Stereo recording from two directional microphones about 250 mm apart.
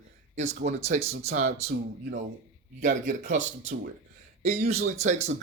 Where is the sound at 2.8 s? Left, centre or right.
Right.